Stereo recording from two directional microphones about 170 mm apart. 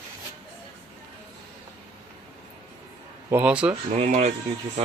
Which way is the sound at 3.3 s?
10° right (ahead or behind).